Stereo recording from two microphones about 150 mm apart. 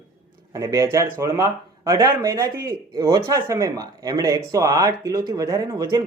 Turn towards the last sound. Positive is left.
turn(degrees=-25)  # may be behind; listen again after turning